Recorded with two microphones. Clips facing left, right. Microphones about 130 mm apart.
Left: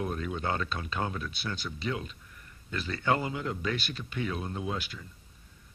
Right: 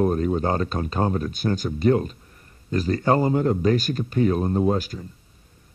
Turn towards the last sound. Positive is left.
turn(degrees=-40)  # may be behind; listen again after turning